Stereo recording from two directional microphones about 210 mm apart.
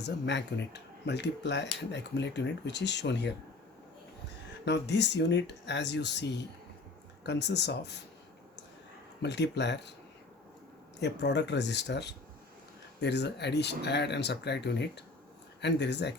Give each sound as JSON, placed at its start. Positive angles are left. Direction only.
{"t": 0.0, "sound": "speech", "side_deg": 55}
{"t": 4.6, "sound": "speech", "side_deg": 55}
{"t": 9.2, "sound": "speech", "side_deg": 55}
{"t": 11.0, "sound": "speech", "side_deg": 55}